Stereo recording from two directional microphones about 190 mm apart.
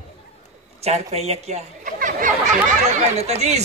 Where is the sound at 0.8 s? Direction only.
35° right (ahead or behind).